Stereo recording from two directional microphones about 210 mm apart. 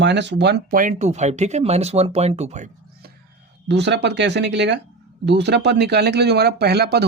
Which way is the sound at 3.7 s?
55° right (ahead or behind).